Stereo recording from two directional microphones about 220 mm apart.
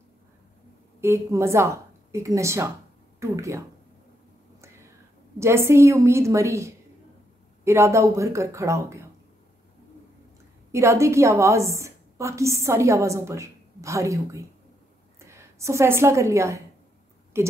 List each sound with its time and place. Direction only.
1.0 s a woman's voice: 10° right (ahead or behind)
5.4 s a woman's voice: 10° right (ahead or behind)
10.7 s a woman's voice: 15° right (ahead or behind)